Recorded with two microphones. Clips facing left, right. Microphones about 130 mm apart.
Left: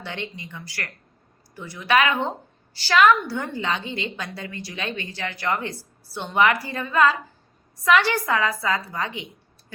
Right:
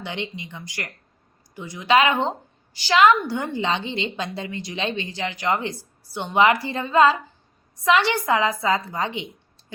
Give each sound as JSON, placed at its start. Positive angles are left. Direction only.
{"t": 0.0, "sound": "a woman's voice", "side_deg": -15}